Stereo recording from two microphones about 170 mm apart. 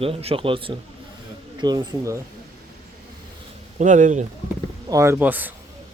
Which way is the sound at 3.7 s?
45° right (ahead or behind).